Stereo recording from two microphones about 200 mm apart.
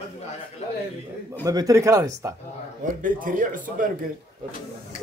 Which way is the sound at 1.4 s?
15° right (ahead or behind).